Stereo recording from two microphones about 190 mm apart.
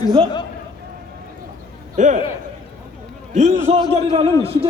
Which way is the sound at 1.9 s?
40° right (ahead or behind).